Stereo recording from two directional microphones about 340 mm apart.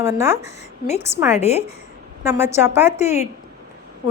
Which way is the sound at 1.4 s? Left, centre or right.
Centre.